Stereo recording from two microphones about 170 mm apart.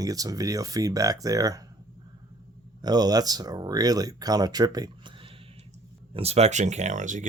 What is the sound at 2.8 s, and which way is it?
Speech, 25° right (ahead or behind).